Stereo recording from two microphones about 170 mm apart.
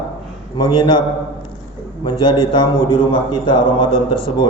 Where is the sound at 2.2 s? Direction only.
30° left (ahead or behind).